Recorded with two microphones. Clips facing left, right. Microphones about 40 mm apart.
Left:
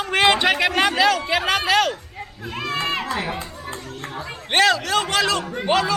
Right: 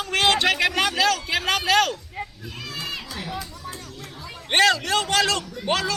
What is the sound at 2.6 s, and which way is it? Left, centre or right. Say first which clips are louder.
Crowd: left 9 dB; left.